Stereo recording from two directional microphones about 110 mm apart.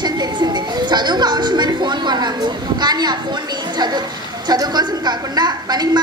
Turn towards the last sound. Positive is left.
turn(degrees=-40)  # may be behind; listen again after turning